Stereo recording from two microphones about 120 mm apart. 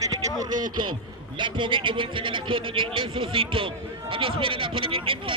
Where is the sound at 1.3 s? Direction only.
45° right (ahead or behind).